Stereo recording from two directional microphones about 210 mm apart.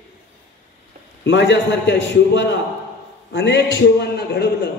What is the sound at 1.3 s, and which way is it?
A man's voice, 60° left (ahead or behind).